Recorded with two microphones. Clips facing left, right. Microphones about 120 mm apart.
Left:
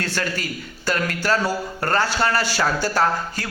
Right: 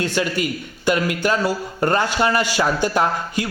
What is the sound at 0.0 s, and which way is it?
A man's voice, 15° right (ahead or behind).